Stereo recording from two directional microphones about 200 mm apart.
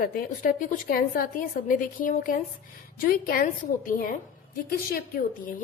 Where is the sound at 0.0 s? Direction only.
45° left (ahead or behind).